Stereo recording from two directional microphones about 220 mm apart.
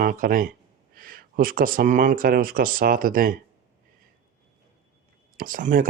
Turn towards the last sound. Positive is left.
turn(degrees=-40)  # may be behind; listen again after turning